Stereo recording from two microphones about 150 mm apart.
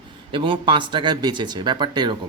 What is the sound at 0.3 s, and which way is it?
A man's voice, 35° right (ahead or behind).